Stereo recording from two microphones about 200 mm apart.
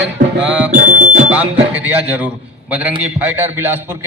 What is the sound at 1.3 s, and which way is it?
A man's voice, 5° right (ahead or behind).